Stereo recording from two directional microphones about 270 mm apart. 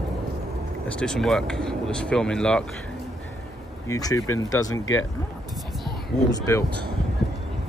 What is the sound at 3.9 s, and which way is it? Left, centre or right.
Speech, centre.